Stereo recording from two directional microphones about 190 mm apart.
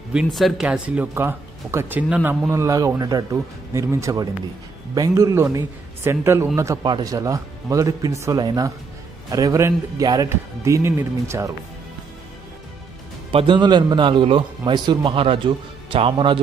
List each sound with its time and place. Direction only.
0.1 s a man's voice: centre (ahead or behind)
2.5 s a man's voice: 15° right (ahead or behind)
13.3 s a man's voice: 25° right (ahead or behind)